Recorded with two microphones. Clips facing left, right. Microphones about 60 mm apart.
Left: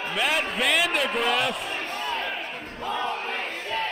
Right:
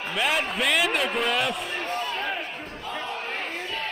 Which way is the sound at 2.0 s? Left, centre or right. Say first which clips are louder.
Left 2 dB; left.